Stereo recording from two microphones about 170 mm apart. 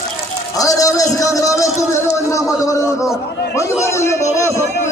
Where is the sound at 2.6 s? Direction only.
20° left (ahead or behind).